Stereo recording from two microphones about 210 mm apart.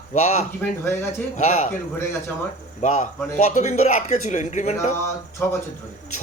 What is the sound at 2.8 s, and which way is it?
Speech, 35° left (ahead or behind).